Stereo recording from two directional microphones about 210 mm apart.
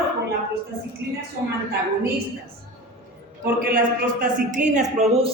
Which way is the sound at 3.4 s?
45° right (ahead or behind).